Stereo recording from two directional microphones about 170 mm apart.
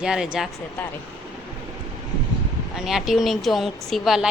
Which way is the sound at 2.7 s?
Centre (ahead or behind).